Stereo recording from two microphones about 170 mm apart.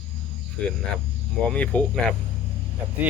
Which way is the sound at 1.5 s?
5° left (ahead or behind).